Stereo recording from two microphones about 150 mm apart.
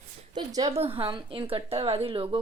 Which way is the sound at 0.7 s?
40° right (ahead or behind).